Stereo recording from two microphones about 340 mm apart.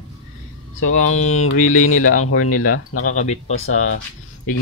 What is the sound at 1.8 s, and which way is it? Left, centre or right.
Speech, left.